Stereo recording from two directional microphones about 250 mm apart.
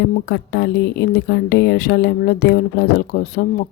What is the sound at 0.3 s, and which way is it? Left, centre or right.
A woman's voice, left.